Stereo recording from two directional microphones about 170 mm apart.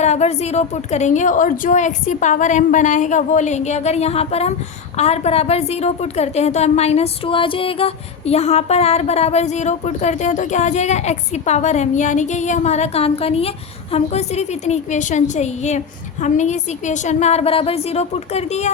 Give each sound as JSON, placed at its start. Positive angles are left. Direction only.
{"t": 0.0, "sound": "a woman's voice", "side_deg": 40}